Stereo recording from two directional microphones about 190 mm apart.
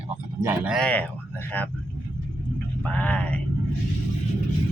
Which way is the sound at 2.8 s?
5° left (ahead or behind).